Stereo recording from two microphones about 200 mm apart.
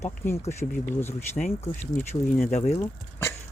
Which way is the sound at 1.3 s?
35° left (ahead or behind).